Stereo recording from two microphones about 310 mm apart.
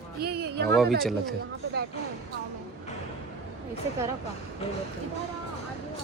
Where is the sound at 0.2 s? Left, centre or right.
Right.